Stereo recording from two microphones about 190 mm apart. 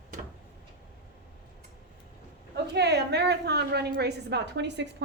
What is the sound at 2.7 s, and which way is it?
A woman's voice, 60° right (ahead or behind).